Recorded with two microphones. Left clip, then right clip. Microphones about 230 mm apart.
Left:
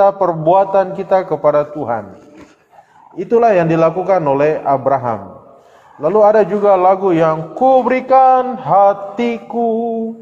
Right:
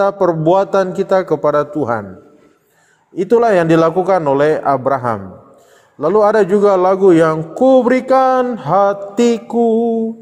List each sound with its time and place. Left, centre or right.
0.0 s a man's voice: right
3.2 s a man's voice: right